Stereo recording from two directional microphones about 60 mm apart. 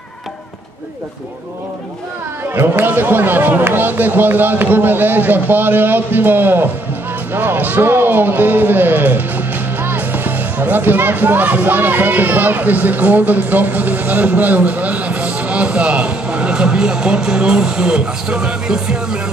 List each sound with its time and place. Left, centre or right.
2.5 s a man's voice: right; by 19.3 s centre